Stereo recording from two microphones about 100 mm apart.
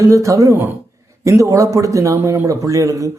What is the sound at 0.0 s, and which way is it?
A man's voice, 30° right (ahead or behind).